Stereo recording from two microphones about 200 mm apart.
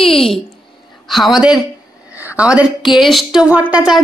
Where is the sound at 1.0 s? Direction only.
Centre (ahead or behind).